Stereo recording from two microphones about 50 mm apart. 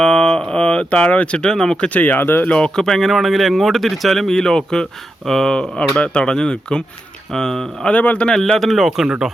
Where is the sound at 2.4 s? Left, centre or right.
Centre.